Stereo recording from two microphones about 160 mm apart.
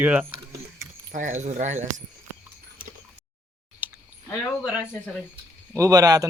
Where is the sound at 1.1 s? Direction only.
50° right (ahead or behind).